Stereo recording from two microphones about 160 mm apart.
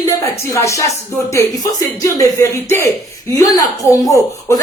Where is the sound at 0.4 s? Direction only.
20° left (ahead or behind).